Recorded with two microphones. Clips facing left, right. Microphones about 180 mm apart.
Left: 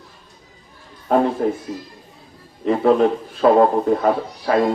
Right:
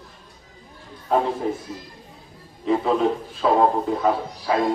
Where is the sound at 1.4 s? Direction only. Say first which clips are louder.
Left 5 dB; 65° left (ahead or behind).